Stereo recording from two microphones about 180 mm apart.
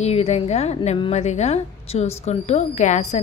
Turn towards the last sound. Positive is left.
turn(degrees=40)  # may be behind; listen again after turning